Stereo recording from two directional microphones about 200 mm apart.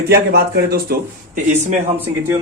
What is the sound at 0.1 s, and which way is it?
Speech, 50° right (ahead or behind).